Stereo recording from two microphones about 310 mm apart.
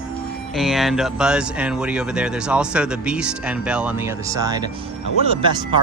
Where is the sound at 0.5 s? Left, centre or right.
Centre.